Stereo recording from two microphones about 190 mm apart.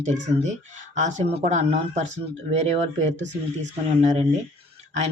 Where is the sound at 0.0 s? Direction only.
40° right (ahead or behind).